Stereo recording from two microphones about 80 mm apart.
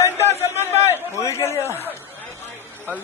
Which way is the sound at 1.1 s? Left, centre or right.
Left.